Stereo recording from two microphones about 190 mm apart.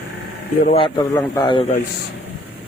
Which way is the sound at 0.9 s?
20° left (ahead or behind).